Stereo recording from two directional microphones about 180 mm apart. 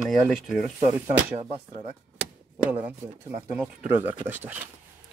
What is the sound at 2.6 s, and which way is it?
Speech, 10° right (ahead or behind).